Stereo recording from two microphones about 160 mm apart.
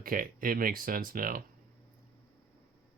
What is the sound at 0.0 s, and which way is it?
Speech, 60° right (ahead or behind).